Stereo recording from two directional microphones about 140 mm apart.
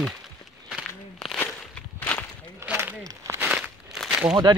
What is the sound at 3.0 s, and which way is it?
Crumpling, 15° right (ahead or behind).